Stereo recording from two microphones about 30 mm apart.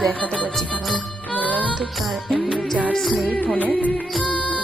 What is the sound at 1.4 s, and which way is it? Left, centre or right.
Music, left.